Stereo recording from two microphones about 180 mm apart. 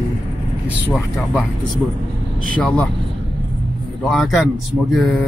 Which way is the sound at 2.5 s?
5° left (ahead or behind).